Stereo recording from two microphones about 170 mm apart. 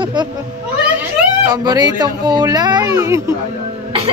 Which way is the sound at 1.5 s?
25° right (ahead or behind).